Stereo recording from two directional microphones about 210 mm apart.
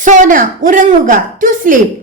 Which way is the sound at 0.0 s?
40° right (ahead or behind).